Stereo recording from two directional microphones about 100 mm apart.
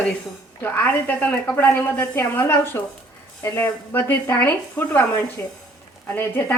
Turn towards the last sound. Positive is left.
turn(degrees=20)  # may be behind; listen again after turning